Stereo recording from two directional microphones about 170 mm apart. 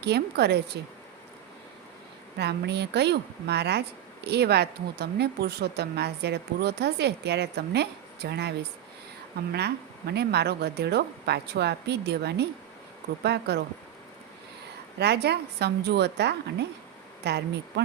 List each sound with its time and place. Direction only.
0.0 s speech: 75° right (ahead or behind)
2.4 s speech: 80° right
14.9 s speech: 75° right (ahead or behind)